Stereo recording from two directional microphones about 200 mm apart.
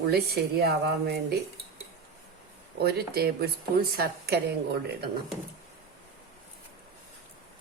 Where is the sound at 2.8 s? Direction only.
50° right (ahead or behind).